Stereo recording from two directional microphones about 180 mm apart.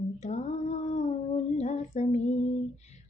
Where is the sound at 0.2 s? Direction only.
40° left (ahead or behind).